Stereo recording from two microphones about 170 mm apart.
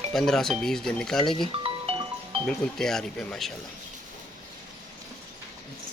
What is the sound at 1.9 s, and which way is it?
Music, 35° right (ahead or behind).